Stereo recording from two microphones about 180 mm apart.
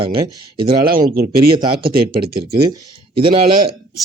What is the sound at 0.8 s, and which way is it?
A man's voice, 55° right (ahead or behind).